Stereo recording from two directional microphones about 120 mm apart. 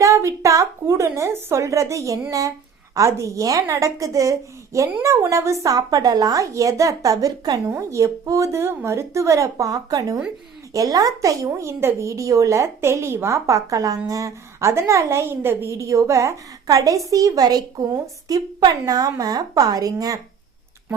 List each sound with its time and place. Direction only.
0.0 s a woman's voice: 25° right (ahead or behind)